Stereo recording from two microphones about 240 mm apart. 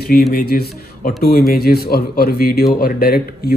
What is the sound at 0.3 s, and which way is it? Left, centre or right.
Speech, left.